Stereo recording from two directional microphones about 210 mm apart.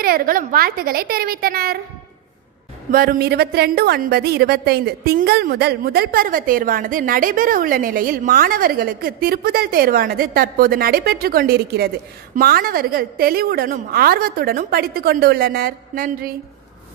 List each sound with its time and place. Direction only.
0.0 s a woman's voice: 45° right (ahead or behind)
2.9 s a woman's voice: 45° right (ahead or behind)